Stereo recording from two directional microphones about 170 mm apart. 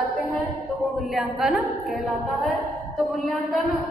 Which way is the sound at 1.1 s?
Centre (ahead or behind).